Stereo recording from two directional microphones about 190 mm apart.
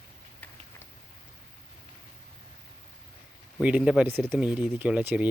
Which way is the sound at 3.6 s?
5° right (ahead or behind).